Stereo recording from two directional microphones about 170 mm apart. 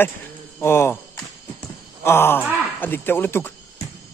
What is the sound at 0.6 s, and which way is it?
Speech, 15° left (ahead or behind).